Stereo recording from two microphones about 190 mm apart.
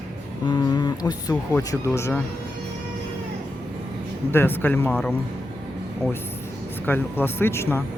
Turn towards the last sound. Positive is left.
turn(degrees=10)  # may be behind; listen again after turning